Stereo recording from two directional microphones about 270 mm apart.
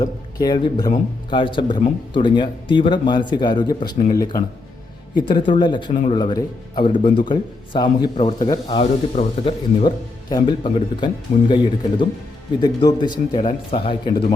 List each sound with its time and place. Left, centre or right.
0.0 s a man's voice: centre